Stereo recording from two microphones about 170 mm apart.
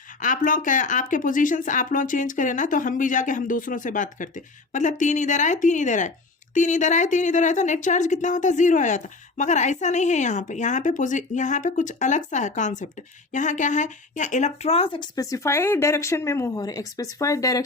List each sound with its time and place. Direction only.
0.2 s speech: 50° left (ahead or behind); by 17.6 s 20° left (ahead or behind)